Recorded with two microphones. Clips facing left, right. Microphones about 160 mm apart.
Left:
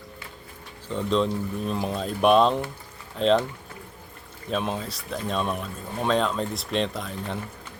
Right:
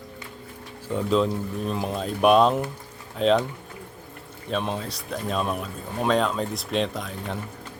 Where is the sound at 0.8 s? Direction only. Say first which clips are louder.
Right 2 dB; 5° right (ahead or behind).